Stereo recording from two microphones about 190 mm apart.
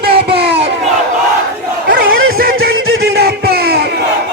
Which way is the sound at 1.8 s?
55° right (ahead or behind).